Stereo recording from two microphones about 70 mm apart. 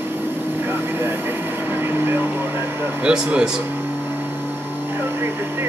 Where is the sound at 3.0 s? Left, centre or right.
Centre.